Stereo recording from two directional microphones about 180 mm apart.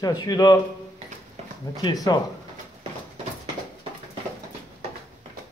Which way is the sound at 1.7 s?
20° left (ahead or behind).